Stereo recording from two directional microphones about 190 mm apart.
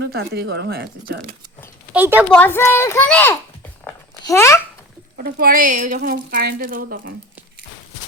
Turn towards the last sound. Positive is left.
turn(degrees=-50)  # may be behind; listen again after turning